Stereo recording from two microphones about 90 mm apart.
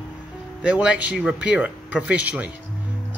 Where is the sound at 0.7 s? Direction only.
15° right (ahead or behind).